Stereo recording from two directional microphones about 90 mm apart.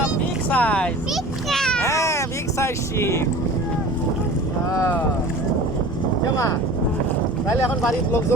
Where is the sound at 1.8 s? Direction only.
35° left (ahead or behind).